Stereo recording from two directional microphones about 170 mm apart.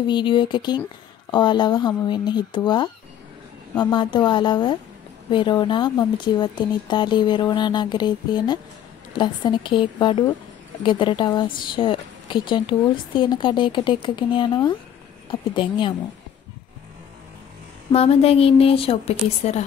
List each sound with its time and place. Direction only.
0.0 s a woman's voice: 25° left (ahead or behind)
17.9 s a woman's voice: 35° left (ahead or behind)